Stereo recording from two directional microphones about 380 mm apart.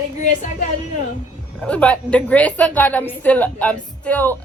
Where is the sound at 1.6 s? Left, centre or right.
Centre.